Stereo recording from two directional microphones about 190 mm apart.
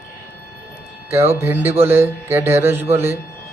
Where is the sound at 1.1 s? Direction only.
15° right (ahead or behind).